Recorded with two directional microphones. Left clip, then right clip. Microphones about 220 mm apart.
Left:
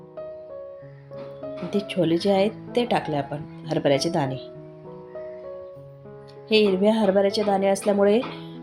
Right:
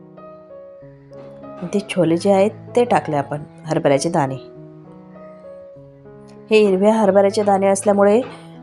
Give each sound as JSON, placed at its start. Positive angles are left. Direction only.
{"t": 1.7, "sound": "speech", "side_deg": -25}
{"t": 6.5, "sound": "speech", "side_deg": -25}